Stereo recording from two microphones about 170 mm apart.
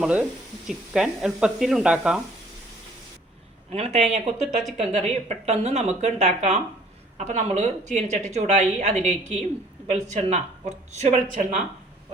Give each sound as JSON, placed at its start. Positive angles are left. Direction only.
{"t": 0.0, "sound": "speech", "side_deg": -10}
{"t": 3.7, "sound": "speech", "side_deg": -35}